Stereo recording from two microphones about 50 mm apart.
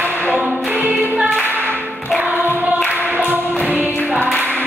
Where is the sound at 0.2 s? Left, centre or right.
Right.